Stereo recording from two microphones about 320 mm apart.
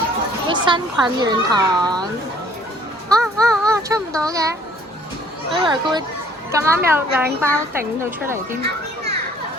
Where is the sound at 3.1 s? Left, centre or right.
Centre.